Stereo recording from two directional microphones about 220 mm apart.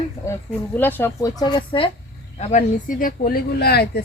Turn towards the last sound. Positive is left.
turn(degrees=45)  # may be behind; listen again after turning